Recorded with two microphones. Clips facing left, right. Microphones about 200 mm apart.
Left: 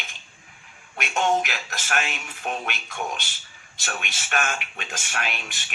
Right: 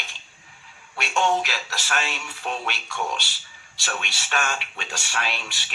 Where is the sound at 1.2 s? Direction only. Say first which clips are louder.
Left 2 dB; 50° left (ahead or behind).